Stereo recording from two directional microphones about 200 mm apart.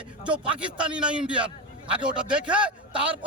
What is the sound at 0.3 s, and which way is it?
A man's voice, 5° right (ahead or behind).